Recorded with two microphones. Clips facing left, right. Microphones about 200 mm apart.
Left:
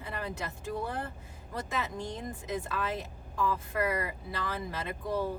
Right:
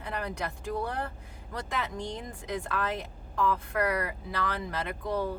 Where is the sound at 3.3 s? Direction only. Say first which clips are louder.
Right 3 dB; 70° right (ahead or behind).